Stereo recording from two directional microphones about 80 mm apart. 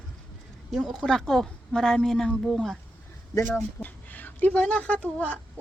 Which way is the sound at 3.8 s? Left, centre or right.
Left.